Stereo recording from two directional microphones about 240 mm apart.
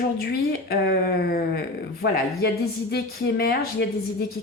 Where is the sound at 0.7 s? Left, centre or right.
Left.